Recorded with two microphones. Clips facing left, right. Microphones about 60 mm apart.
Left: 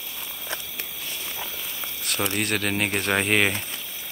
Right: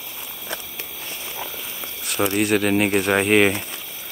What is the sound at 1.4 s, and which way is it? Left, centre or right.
Speech, centre.